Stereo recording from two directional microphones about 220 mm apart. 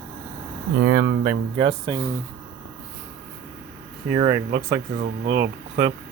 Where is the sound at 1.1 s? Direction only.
40° right (ahead or behind).